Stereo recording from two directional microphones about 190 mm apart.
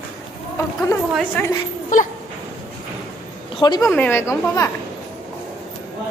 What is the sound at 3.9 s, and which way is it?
Speech, 10° left (ahead or behind).